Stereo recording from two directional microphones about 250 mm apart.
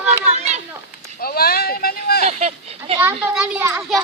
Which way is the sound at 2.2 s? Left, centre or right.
Right.